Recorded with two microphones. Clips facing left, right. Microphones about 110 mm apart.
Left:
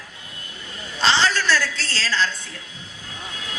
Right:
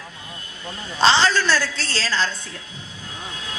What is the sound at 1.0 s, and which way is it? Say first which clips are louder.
A woman's voice: right 3 dB; 30° right (ahead or behind).